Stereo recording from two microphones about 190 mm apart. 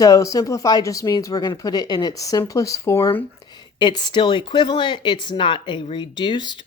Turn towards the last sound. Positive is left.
turn(degrees=25)  # may be behind; listen again after turning